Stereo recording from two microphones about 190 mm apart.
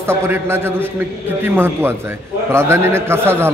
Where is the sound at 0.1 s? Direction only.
10° right (ahead or behind).